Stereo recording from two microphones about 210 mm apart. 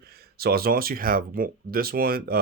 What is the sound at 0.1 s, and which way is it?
Speech, 50° right (ahead or behind).